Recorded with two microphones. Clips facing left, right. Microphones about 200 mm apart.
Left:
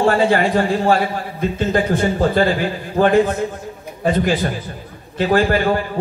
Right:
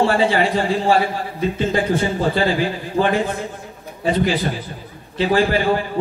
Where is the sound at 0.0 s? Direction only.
50° left (ahead or behind).